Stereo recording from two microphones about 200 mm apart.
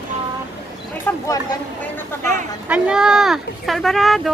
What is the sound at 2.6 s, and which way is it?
Speech, 5° right (ahead or behind).